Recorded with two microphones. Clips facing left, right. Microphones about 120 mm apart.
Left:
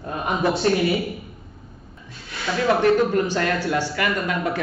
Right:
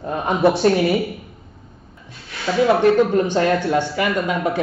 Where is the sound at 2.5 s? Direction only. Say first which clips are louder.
Right 4 dB; 20° right (ahead or behind).